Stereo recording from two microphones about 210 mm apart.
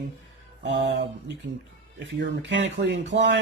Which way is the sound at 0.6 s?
55° right (ahead or behind).